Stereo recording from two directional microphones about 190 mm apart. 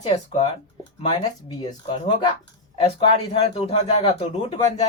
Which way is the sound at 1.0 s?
25° left (ahead or behind).